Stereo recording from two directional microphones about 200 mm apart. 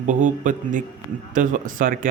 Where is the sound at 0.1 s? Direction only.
40° right (ahead or behind).